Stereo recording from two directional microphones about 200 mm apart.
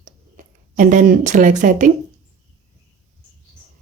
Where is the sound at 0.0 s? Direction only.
40° right (ahead or behind).